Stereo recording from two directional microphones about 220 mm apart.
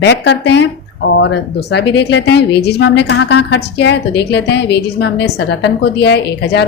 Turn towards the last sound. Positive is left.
turn(degrees=50)  # may be behind; listen again after turning